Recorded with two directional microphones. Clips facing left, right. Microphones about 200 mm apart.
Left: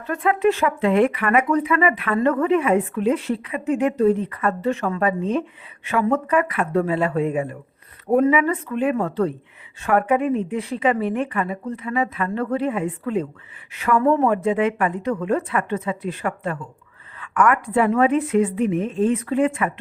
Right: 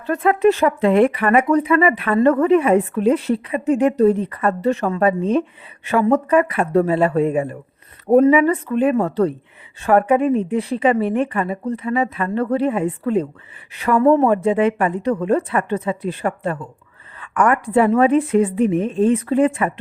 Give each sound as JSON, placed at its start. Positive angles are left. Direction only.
{"t": 0.1, "sound": "speech", "side_deg": -40}